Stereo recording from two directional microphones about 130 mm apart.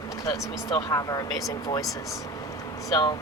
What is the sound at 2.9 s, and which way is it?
Speech, 35° left (ahead or behind).